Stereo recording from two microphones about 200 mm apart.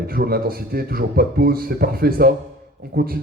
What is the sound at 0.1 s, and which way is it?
A man's voice, 50° right (ahead or behind).